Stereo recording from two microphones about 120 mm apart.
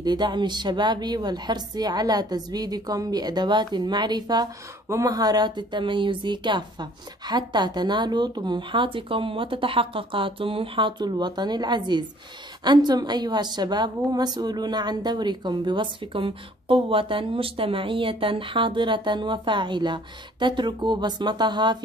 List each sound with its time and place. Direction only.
0.0 s a woman's voice: 35° right (ahead or behind)